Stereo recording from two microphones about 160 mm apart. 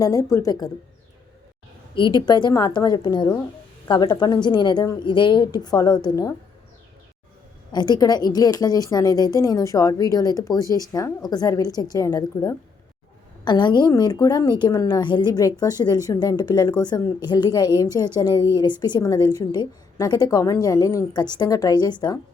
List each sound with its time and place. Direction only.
0.0 s a woman's voice: 20° left (ahead or behind)
2.0 s a woman's voice: 30° left (ahead or behind)
7.7 s a woman's voice: 25° left (ahead or behind)